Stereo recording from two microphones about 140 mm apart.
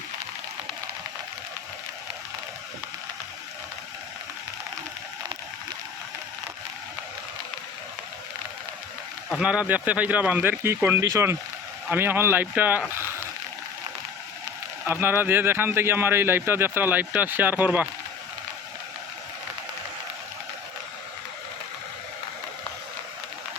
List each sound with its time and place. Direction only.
9.4 s speech: 10° right (ahead or behind)
14.8 s speech: 15° right (ahead or behind)